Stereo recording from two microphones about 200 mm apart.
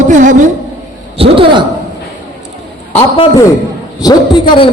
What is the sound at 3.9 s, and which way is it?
Speech, 20° left (ahead or behind).